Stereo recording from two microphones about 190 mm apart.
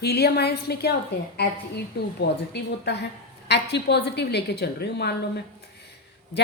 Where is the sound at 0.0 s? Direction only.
60° left (ahead or behind).